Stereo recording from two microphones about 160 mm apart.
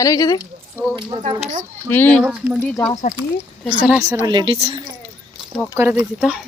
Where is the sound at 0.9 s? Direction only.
40° right (ahead or behind).